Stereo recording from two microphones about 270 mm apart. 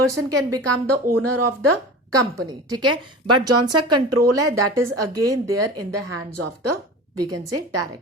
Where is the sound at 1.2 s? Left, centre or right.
Right.